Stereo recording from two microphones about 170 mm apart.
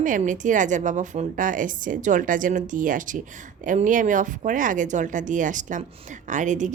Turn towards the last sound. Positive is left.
turn(degrees=-45)  # may be behind; listen again after turning